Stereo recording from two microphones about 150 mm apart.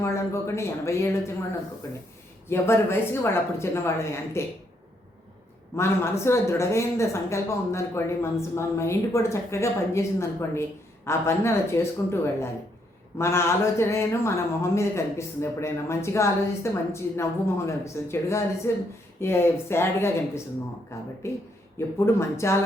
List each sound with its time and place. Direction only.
0.0 s speech: 20° left (ahead or behind)
2.5 s speech: 15° left (ahead or behind)
5.7 s speech: 20° left (ahead or behind)